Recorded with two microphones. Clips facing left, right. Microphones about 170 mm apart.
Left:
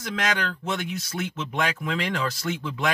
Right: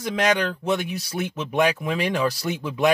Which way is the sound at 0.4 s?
15° right (ahead or behind).